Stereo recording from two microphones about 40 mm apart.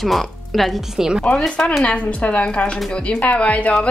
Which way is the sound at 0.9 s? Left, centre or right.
Centre.